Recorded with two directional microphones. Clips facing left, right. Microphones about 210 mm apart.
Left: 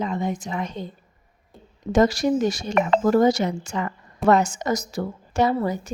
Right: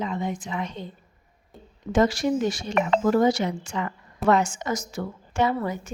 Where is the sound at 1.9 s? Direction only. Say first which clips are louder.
Left 3 dB; 40° left (ahead or behind).